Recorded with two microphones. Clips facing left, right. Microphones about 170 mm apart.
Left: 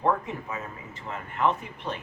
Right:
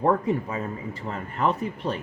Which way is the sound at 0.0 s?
35° right (ahead or behind).